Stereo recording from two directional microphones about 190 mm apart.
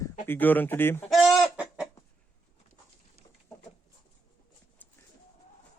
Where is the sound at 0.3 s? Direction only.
10° left (ahead or behind).